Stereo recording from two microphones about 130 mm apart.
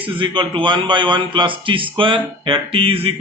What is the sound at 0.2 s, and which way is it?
A man's voice, 40° right (ahead or behind).